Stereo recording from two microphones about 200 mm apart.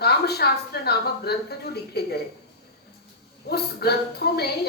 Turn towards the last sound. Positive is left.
turn(degrees=55)  # may be behind; listen again after turning